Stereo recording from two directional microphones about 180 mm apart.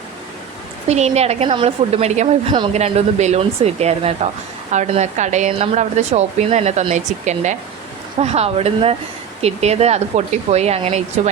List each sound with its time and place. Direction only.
0.9 s a woman's voice: 40° right (ahead or behind)